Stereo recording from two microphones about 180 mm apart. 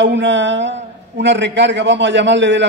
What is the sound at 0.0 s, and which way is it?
A man's voice, 90° right.